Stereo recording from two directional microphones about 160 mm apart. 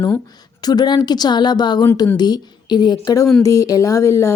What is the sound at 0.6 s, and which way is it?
A woman's voice, 25° left (ahead or behind).